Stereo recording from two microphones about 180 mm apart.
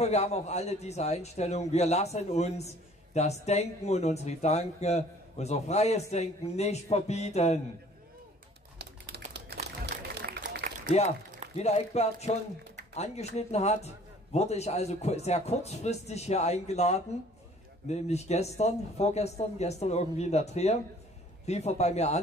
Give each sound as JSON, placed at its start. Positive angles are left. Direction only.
{"t": 0.0, "sound": "speech", "side_deg": 35}
{"t": 8.7, "sound": "typewriter", "side_deg": -70}
{"t": 9.3, "sound": "applause", "side_deg": -65}
{"t": 11.5, "sound": "speech", "side_deg": 35}